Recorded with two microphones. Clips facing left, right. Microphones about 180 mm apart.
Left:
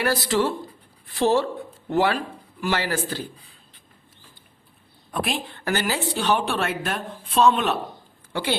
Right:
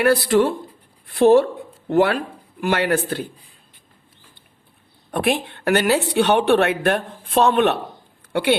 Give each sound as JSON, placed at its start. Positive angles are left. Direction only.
{"t": 0.0, "sound": "a woman's voice", "side_deg": -55}
{"t": 5.1, "sound": "a woman's voice", "side_deg": -60}